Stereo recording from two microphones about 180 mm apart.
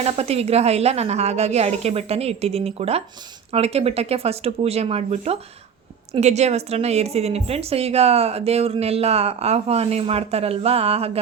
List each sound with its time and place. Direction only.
0.0 s a woman's voice: 35° right (ahead or behind)